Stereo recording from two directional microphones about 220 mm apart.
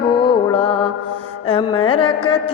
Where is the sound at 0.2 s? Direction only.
25° left (ahead or behind).